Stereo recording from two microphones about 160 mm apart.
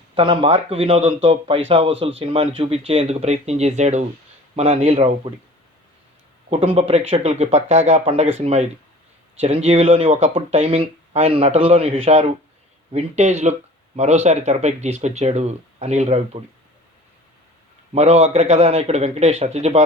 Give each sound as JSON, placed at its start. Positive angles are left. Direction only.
{"t": 0.1, "sound": "speech", "side_deg": -35}
{"t": 6.5, "sound": "speech", "side_deg": -35}
{"t": 17.9, "sound": "speech", "side_deg": -45}